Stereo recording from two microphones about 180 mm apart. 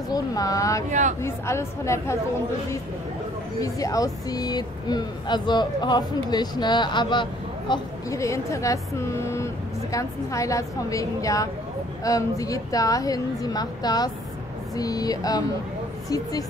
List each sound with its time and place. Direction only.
0.1 s a woman's voice: 20° left (ahead or behind)
3.6 s speech: 20° left (ahead or behind)